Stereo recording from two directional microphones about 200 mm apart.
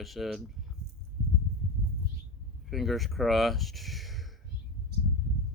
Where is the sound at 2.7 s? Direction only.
Centre (ahead or behind).